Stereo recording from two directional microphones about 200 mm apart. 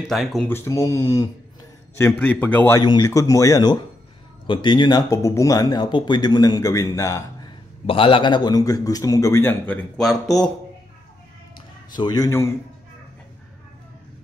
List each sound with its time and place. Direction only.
0.1 s a man's voice: centre (ahead or behind)
11.9 s a man's voice: 20° left (ahead or behind)